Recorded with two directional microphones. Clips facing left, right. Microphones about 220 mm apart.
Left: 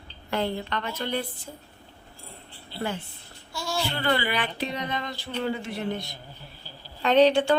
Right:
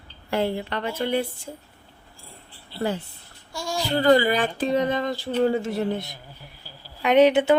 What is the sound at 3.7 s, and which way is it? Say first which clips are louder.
A woman's voice: right 9 dB; 40° right (ahead or behind).